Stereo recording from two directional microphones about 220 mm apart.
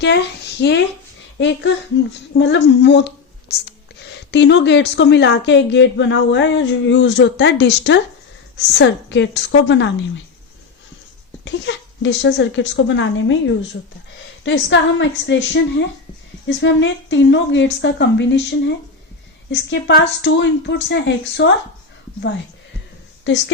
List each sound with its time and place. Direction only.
0.0 s speech: 50° left (ahead or behind)
11.4 s a woman's voice: 55° left (ahead or behind)
23.3 s a woman's voice: 55° left (ahead or behind)